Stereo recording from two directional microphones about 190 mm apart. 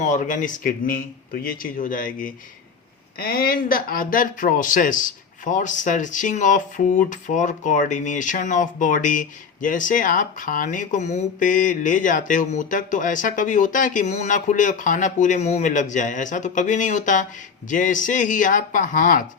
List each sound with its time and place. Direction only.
0.0 s speech: 45° left (ahead or behind)